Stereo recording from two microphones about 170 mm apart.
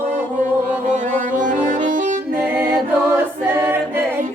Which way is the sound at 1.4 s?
50° right (ahead or behind).